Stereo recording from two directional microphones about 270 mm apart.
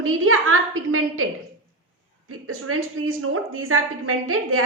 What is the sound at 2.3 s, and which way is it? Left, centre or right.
A woman's voice, right.